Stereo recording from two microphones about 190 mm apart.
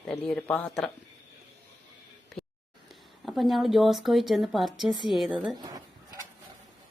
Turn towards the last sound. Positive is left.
turn(degrees=-20)  # may be behind; listen again after turning